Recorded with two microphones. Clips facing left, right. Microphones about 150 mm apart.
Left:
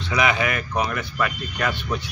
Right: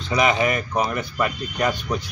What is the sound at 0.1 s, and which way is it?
A man's voice, 35° right (ahead or behind).